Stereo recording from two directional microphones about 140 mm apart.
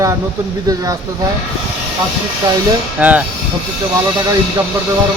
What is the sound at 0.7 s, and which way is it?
Speech, 25° right (ahead or behind).